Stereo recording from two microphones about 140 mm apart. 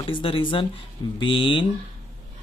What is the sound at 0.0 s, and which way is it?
Speech, 40° left (ahead or behind).